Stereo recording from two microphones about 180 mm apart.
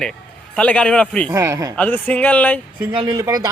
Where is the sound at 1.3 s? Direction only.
15° right (ahead or behind).